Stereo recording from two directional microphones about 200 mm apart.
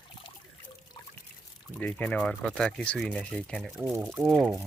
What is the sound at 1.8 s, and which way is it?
Speech, 5° left (ahead or behind).